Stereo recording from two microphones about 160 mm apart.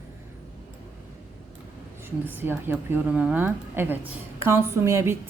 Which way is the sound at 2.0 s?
15° right (ahead or behind).